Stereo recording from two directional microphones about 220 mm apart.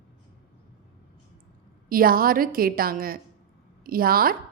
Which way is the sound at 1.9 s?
40° right (ahead or behind).